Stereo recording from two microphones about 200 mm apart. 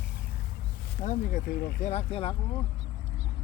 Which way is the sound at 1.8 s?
35° left (ahead or behind).